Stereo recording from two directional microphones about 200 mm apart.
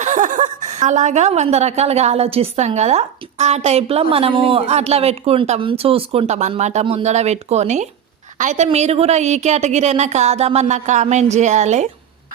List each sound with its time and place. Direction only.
0.0 s a woman's voice: 40° right (ahead or behind)